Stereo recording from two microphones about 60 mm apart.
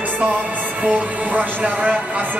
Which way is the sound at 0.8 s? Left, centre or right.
Right.